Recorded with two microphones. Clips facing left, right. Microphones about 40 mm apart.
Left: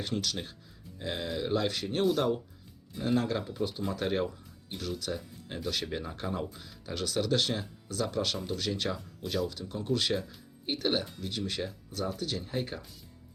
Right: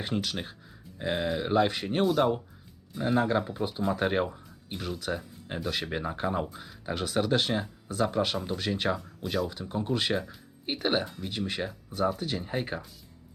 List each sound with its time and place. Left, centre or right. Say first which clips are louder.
0.0 s speech: right 2 dB; right
9.0 s speech: right 2 dB; centre
9.5 s speech: right 2 dB; right